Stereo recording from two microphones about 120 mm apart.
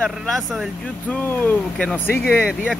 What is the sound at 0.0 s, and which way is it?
Speech, 5° left (ahead or behind).